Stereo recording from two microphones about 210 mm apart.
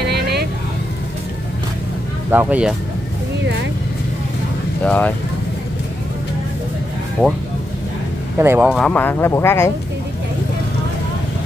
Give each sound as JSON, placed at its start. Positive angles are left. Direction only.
{"t": 0.0, "sound": "vehicle", "side_deg": -50}
{"t": 2.3, "sound": "speech", "side_deg": -5}
{"t": 4.8, "sound": "speech", "side_deg": 5}
{"t": 8.4, "sound": "speech", "side_deg": -10}
{"t": 8.6, "sound": "speech", "side_deg": 0}